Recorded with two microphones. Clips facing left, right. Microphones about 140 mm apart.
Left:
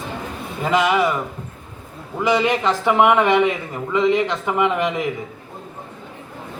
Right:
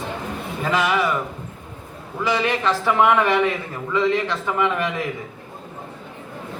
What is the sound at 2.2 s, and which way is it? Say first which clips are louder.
A man's voice: left 3 dB; 15° left (ahead or behind).